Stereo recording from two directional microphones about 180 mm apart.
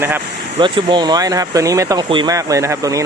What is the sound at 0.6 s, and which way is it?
Speech, 25° right (ahead or behind).